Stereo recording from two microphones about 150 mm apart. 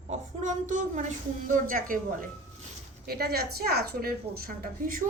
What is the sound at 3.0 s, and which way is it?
A woman's voice, 90° right.